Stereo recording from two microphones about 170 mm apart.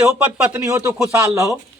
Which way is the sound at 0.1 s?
5° right (ahead or behind).